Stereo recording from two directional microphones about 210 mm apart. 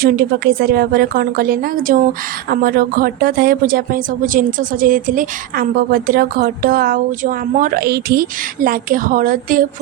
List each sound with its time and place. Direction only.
0.0 s a woman's voice: 45° right (ahead or behind)